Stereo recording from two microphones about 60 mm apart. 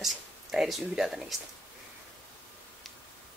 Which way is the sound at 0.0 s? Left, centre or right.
Centre.